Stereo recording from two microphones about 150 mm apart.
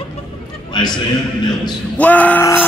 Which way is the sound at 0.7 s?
30° left (ahead or behind).